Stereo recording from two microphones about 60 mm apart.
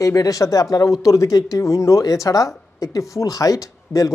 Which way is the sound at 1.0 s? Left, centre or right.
Left.